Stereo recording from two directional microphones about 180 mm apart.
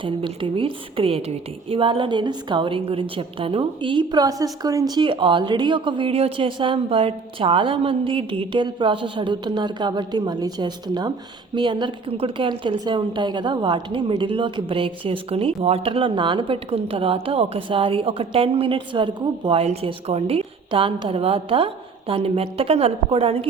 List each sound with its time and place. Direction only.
0.0 s a woman's voice: 30° right (ahead or behind)